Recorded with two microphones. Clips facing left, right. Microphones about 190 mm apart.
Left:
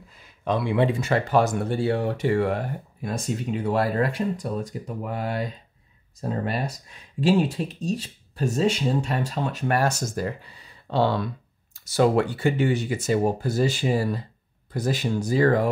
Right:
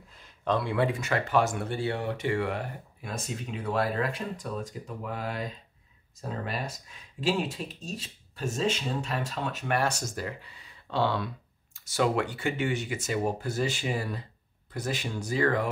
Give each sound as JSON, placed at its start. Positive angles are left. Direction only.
{"t": 0.2, "sound": "speech", "side_deg": 10}
{"t": 7.2, "sound": "speech", "side_deg": 35}